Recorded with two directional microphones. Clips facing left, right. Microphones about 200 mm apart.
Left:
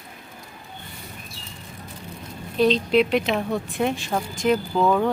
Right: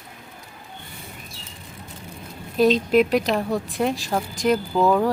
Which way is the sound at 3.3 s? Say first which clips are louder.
Right 1 dB; centre (ahead or behind).